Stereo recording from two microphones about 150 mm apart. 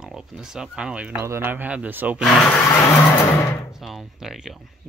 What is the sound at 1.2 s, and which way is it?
Speech, 15° right (ahead or behind).